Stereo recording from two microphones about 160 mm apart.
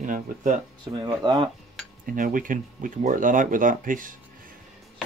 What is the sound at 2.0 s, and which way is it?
Speech, 60° right (ahead or behind).